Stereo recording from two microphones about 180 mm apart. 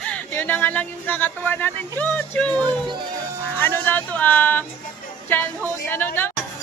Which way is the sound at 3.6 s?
10° left (ahead or behind).